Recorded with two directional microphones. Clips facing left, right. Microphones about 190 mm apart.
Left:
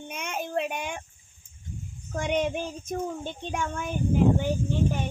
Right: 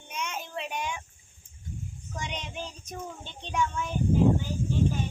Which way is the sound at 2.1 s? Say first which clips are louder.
Left 11 dB; 55° left (ahead or behind).